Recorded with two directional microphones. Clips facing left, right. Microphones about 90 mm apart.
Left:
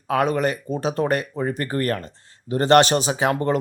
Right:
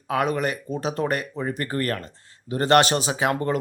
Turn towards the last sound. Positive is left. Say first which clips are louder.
# left 3 dB
turn(degrees=30)  # may be behind; listen again after turning